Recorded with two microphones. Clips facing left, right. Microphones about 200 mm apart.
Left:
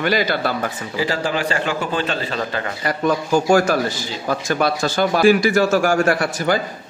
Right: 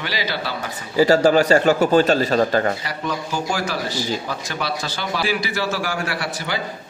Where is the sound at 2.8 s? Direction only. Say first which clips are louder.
Left 7 dB; 50° left (ahead or behind).